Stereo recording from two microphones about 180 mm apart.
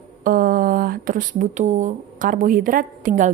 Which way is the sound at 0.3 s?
50° right (ahead or behind).